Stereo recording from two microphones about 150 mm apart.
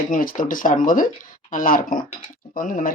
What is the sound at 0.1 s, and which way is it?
Speech, 65° left (ahead or behind).